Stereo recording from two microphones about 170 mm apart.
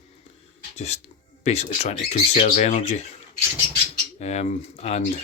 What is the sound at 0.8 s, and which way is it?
Speech, 40° left (ahead or behind).